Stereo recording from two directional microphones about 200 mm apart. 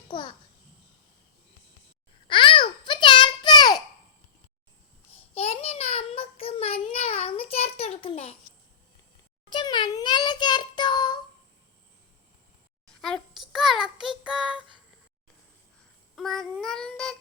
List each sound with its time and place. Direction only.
0.1 s a child's voice: 20° left (ahead or behind)
2.2 s a sound: 25° left (ahead or behind)
5.3 s child singing: 30° left (ahead or behind)
9.5 s child singing: 20° left (ahead or behind)
13.0 s child singing: centre (ahead or behind)
16.1 s child singing: centre (ahead or behind)